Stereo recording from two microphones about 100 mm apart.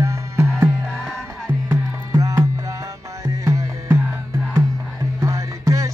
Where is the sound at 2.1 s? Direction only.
35° right (ahead or behind).